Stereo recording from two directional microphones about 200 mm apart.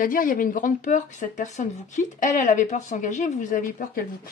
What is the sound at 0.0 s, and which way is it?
Speech, 45° left (ahead or behind).